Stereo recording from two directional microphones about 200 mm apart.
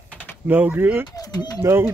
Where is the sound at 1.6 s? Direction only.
10° right (ahead or behind).